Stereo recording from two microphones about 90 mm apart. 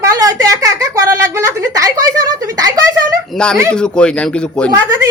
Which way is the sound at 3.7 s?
10° left (ahead or behind).